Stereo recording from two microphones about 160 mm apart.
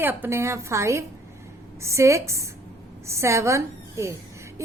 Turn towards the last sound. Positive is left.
turn(degrees=-15)  # may be behind; listen again after turning